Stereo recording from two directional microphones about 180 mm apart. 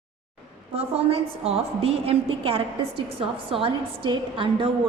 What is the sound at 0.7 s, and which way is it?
A woman's voice, 35° right (ahead or behind).